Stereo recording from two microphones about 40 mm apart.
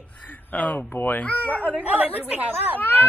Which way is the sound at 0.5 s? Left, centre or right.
Left.